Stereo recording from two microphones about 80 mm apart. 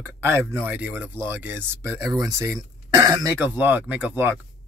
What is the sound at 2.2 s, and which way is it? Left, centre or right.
Speech, right.